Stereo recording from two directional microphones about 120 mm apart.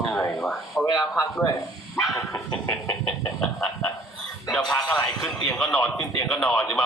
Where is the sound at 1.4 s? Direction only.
30° left (ahead or behind).